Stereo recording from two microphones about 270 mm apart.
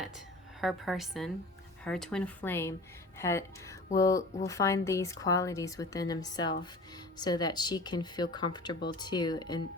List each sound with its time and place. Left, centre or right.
0.6 s speech: centre